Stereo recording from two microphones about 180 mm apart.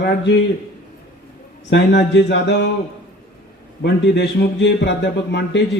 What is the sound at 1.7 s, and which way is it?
Speech, 80° left.